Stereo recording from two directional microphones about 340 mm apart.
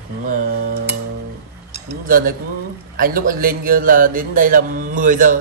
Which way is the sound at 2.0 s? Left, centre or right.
Right.